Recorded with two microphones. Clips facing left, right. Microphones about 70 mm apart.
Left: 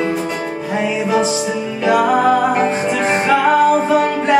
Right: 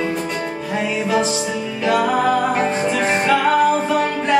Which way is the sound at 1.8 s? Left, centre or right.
Centre.